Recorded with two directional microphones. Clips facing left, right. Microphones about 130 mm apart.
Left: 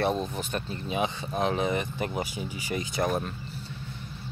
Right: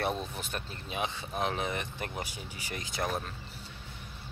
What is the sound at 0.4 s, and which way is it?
Speech, centre (ahead or behind).